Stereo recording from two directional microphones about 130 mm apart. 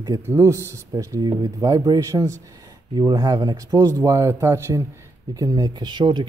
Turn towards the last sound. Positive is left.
turn(degrees=-35)  # may be behind; listen again after turning